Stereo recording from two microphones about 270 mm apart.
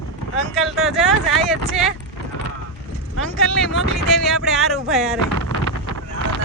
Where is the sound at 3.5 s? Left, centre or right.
Centre.